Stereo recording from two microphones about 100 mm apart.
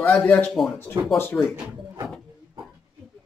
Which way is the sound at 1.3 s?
20° left (ahead or behind).